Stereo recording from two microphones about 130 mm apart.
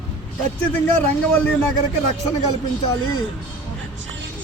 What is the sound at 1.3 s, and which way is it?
Speech, 10° left (ahead or behind).